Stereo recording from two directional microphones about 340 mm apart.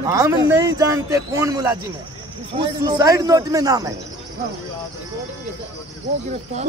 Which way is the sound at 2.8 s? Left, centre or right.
Centre.